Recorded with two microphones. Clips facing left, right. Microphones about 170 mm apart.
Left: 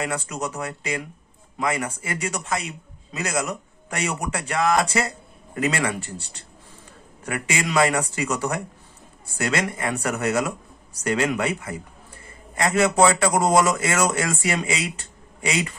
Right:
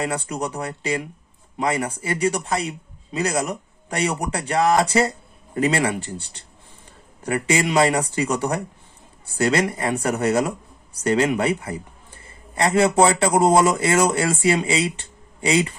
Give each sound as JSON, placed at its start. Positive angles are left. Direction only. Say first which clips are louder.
{"t": 0.0, "sound": "speech", "louder": "right 2 dB", "side_deg": -30}